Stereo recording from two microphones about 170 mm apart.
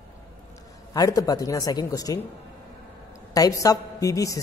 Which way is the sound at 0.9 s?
20° left (ahead or behind).